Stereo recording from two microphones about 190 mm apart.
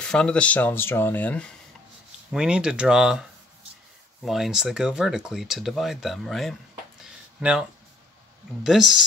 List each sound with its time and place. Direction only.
0.0 s speech: 5° left (ahead or behind)
2.3 s speech: 5° right (ahead or behind)
7.0 s a sound: 5° right (ahead or behind)
8.6 s speech: centre (ahead or behind)